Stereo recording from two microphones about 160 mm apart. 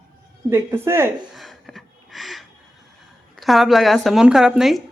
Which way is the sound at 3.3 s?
Centre (ahead or behind).